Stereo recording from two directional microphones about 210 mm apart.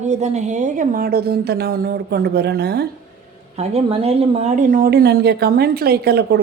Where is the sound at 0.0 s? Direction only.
35° right (ahead or behind); by 2.8 s 50° right (ahead or behind).